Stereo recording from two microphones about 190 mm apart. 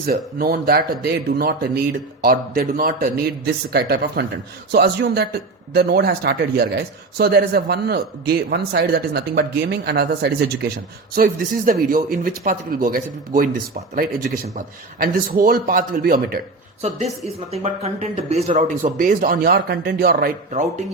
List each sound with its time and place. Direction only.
0.0 s speech: 55° right (ahead or behind)
11.1 s speech: 50° right (ahead or behind)
14.5 s speech: 50° right (ahead or behind)
17.5 s speech: 35° right (ahead or behind); by 20.3 s 55° right (ahead or behind)
20.5 s speech: 40° right (ahead or behind)